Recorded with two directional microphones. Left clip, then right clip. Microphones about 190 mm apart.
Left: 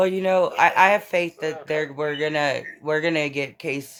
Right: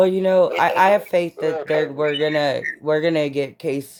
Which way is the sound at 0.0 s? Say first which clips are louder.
Right 4 dB; 30° right (ahead or behind).